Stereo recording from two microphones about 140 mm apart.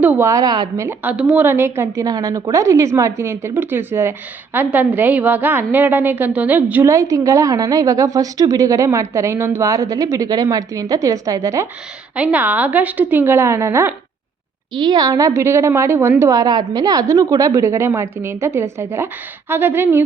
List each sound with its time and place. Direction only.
0.0 s a woman's voice: 10° right (ahead or behind)
0.3 s a woman's voice: 25° right (ahead or behind)
0.9 s a woman's voice: 10° right (ahead or behind)
6.9 s a woman's voice: 25° right (ahead or behind)
12.1 s a woman's voice: 10° right (ahead or behind)
14.7 s a woman's voice: 35° right (ahead or behind); by 20.0 s 15° right (ahead or behind)